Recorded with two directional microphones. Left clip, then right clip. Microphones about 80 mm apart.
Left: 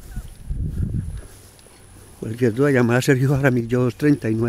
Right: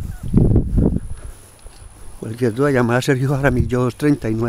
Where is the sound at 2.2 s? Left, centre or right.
Centre.